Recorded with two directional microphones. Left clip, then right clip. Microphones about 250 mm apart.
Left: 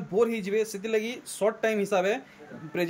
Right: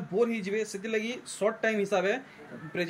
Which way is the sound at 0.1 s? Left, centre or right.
Centre.